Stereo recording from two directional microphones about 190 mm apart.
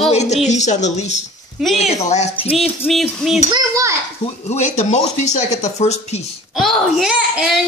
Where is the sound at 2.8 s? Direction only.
5° left (ahead or behind).